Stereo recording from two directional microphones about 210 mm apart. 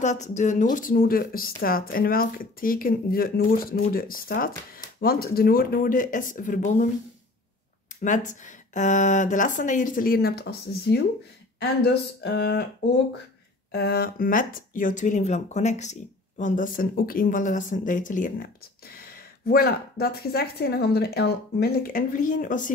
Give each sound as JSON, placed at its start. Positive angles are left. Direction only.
{"t": 0.0, "sound": "speech", "side_deg": 35}
{"t": 8.0, "sound": "speech", "side_deg": 35}
{"t": 13.7, "sound": "speech", "side_deg": 50}